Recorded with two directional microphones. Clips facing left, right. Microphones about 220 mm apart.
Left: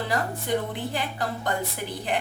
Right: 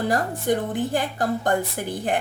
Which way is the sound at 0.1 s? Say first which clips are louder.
Right 4 dB; 45° right (ahead or behind).